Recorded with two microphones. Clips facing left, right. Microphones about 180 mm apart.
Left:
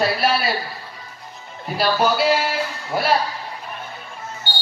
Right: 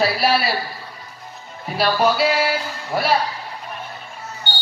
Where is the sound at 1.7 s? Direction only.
Centre (ahead or behind).